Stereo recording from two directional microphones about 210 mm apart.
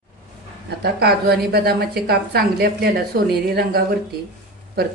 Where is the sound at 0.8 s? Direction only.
50° right (ahead or behind).